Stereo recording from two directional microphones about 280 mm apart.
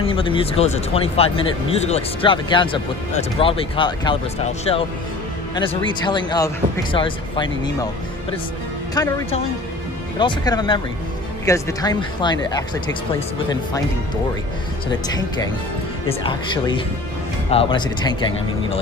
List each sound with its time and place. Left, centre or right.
0.0 s speech: centre
8.9 s speech: centre
14.9 s speech: centre